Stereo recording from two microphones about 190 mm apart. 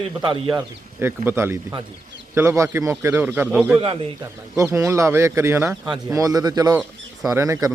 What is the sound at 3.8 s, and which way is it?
Speech, 30° right (ahead or behind).